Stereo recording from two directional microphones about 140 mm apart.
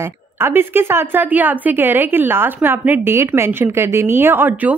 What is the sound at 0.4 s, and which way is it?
A woman's voice, 15° right (ahead or behind).